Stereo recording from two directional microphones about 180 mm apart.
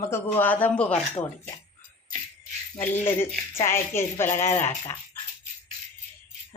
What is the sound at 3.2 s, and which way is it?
A woman's voice, 15° left (ahead or behind).